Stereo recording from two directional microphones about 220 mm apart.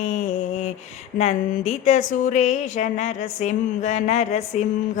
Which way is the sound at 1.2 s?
30° left (ahead or behind).